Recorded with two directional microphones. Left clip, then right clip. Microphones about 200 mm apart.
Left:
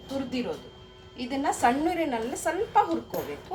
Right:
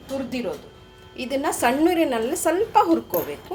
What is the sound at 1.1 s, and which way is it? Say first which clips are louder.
Speech: right 4 dB; 50° right (ahead or behind).